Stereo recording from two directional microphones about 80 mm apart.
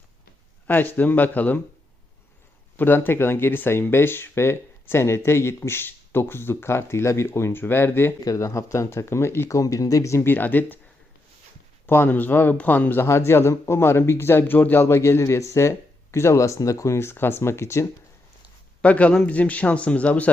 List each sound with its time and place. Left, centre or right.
0.7 s speech: left
2.7 s speech: left
8.2 s speech: left
9.5 s speech: left
11.9 s speech: left
18.8 s a man's voice: centre